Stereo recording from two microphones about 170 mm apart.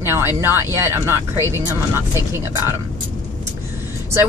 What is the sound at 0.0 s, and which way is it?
Speech, 15° right (ahead or behind).